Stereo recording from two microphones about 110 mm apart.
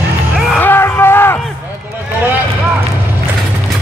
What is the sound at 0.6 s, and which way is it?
Music, 20° left (ahead or behind).